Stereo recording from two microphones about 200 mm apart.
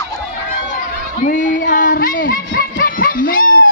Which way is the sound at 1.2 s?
40° left (ahead or behind).